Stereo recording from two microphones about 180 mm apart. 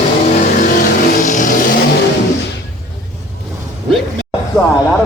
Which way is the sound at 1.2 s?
45° left (ahead or behind).